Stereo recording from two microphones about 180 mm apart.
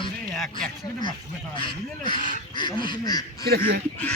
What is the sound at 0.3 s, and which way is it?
Speech, centre (ahead or behind).